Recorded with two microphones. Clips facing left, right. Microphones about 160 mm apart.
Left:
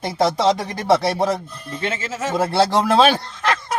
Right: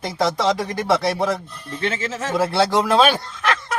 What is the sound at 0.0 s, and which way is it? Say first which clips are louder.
Speech: left 2 dB; 25° left (ahead or behind).